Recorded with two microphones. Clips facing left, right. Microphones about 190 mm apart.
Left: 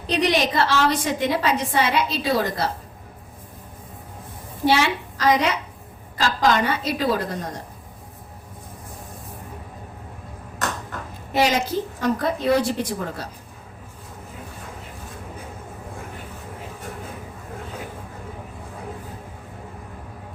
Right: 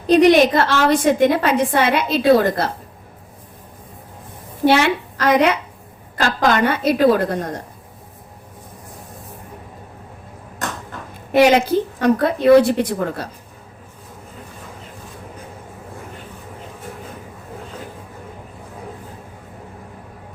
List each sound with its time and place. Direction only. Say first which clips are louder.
0.1 s a woman's voice: right 10 dB; 50° right (ahead or behind)
4.6 s a woman's voice: right 5 dB; 55° right (ahead or behind)
11.3 s a woman's voice: right 8 dB; 60° right (ahead or behind)